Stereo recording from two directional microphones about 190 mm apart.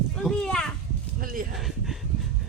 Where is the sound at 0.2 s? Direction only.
5° left (ahead or behind).